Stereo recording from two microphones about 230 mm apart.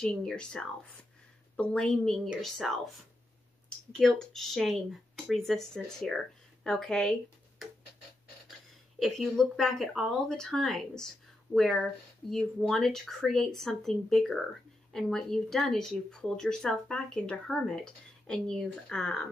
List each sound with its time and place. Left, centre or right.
0.0 s speech: centre
3.9 s speech: centre
9.0 s speech: centre